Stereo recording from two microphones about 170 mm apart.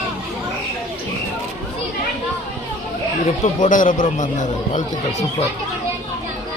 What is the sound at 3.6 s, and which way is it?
Speech, 50° left (ahead or behind).